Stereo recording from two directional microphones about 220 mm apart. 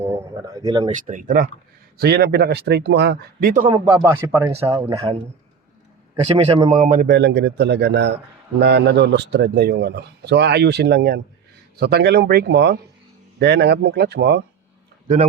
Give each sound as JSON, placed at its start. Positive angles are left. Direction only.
{"t": 0.0, "sound": "speech", "side_deg": -10}
{"t": 1.0, "sound": "speech", "side_deg": -35}
{"t": 2.0, "sound": "speech", "side_deg": -45}
{"t": 3.7, "sound": "speech", "side_deg": -15}
{"t": 4.8, "sound": "speech", "side_deg": -25}
{"t": 6.3, "sound": "speech", "side_deg": -30}
{"t": 15.0, "sound": "speech", "side_deg": -35}